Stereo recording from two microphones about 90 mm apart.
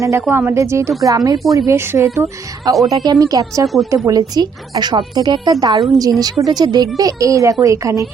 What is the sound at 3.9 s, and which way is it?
Speech, 40° right (ahead or behind).